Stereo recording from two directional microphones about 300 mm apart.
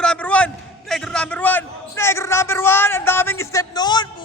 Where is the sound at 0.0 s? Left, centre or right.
Centre.